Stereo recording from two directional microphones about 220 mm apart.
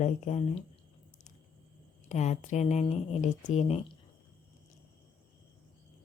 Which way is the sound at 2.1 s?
30° left (ahead or behind).